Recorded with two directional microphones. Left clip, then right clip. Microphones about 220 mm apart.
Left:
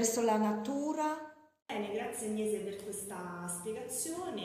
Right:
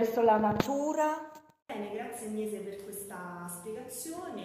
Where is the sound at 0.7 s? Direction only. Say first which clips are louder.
Right 5 dB; 25° left (ahead or behind).